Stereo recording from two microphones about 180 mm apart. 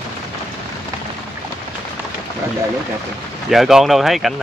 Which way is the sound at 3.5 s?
Centre (ahead or behind).